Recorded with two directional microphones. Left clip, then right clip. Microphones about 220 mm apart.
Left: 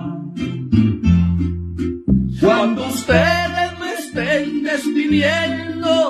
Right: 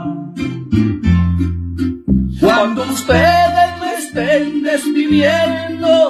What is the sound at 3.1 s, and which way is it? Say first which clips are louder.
Music: right 5 dB; 15° left (ahead or behind).